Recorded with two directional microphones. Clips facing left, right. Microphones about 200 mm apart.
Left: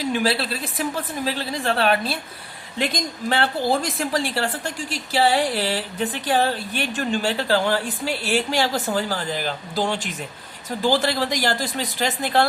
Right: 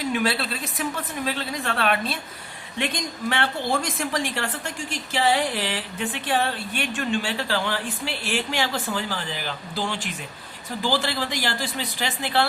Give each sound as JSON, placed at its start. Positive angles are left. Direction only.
{"t": 0.1, "sound": "speech", "side_deg": 30}